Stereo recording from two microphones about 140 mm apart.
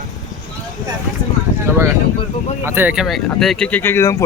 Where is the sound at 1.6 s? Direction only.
15° right (ahead or behind).